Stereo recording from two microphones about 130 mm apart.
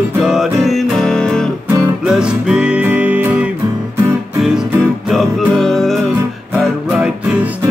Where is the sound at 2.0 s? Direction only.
5° right (ahead or behind).